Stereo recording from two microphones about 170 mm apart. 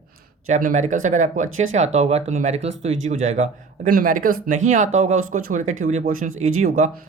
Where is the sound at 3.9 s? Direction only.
55° right (ahead or behind).